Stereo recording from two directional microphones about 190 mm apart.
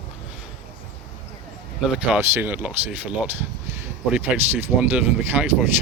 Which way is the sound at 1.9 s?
10° right (ahead or behind).